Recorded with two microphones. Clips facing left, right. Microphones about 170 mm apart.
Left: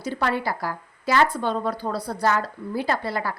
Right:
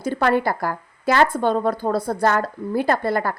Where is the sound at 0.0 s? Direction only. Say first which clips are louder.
Right 6 dB; 50° right (ahead or behind).